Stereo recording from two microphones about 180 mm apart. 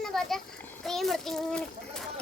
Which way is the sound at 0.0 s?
Centre (ahead or behind).